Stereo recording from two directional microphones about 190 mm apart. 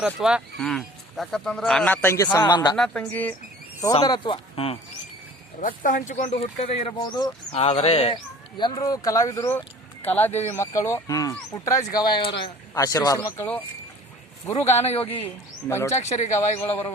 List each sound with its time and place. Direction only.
0.0 s speech: 5° right (ahead or behind); by 2.7 s 20° left (ahead or behind)
2.7 s speech: 5° left (ahead or behind)
3.8 s speech: 20° left (ahead or behind)
5.5 s speech: 45° left (ahead or behind); by 13.6 s 10° left (ahead or behind)
14.5 s speech: 35° left (ahead or behind)